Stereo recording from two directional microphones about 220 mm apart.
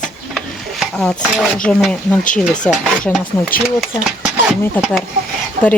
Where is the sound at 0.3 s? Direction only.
Centre (ahead or behind).